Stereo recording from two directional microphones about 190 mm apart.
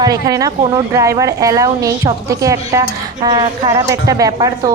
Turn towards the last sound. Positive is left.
turn(degrees=-20)  # may be behind; listen again after turning